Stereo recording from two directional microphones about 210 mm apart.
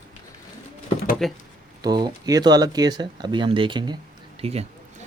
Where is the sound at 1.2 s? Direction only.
Centre (ahead or behind).